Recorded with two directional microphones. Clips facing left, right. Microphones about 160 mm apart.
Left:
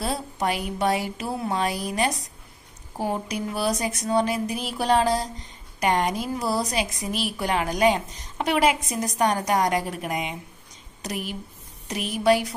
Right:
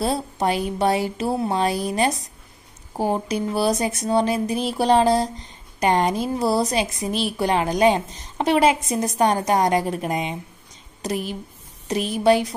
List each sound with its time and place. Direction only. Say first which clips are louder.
0.0 s a woman's voice: right 4 dB; 30° right (ahead or behind)